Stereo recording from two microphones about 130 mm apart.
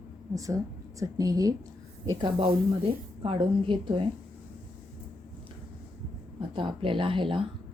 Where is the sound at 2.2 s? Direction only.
40° right (ahead or behind).